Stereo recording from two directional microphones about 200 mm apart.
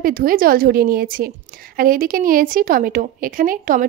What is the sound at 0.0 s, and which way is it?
A woman's voice, 45° right (ahead or behind).